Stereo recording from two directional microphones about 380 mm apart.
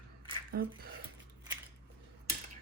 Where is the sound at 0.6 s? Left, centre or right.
Right.